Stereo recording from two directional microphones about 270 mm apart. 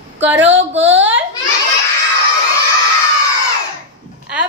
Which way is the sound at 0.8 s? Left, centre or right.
Right.